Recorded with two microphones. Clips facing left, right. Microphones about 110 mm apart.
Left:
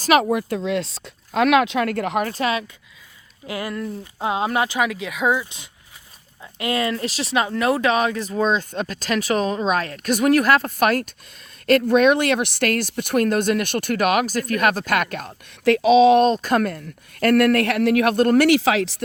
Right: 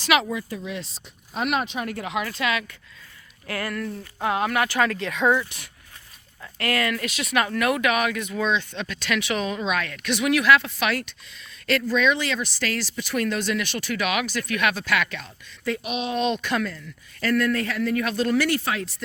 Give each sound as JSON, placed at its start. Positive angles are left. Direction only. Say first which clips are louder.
{"t": 0.0, "sound": "speech", "louder": "left 5 dB", "side_deg": 40}
{"t": 0.3, "sound": "speech", "louder": "left 8 dB", "side_deg": 65}
{"t": 2.3, "sound": "speech", "louder": "left 3 dB", "side_deg": 35}
{"t": 3.4, "sound": "speech", "louder": "left 2 dB", "side_deg": 15}
{"t": 4.8, "sound": "speech", "louder": "even", "side_deg": 5}
{"t": 15.6, "sound": "speech", "louder": "left 15 dB", "side_deg": 80}
{"t": 16.2, "sound": "speech", "louder": "left 6 dB", "side_deg": 40}